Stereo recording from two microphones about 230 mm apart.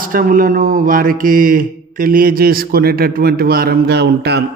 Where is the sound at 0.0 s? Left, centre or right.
Right.